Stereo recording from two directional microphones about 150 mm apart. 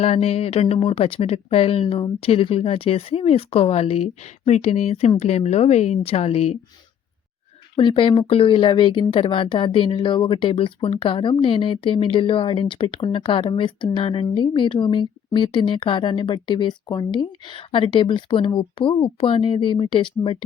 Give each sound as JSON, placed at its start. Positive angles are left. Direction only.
{"t": 0.0, "sound": "speech", "side_deg": 40}
{"t": 7.8, "sound": "speech", "side_deg": 35}